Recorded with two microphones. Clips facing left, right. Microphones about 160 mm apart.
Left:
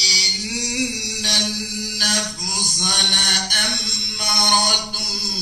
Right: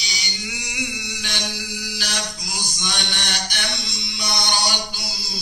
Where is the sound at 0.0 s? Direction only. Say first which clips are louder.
Left 2 dB; 35° left (ahead or behind).